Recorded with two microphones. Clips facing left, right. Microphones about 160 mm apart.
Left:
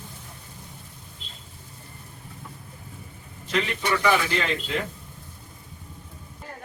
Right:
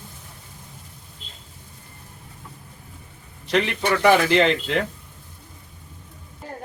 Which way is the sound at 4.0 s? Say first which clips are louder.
Right 9 dB; 75° right (ahead or behind).